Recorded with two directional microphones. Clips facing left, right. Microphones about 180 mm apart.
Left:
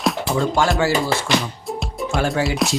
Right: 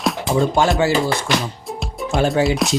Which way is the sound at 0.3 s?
20° right (ahead or behind).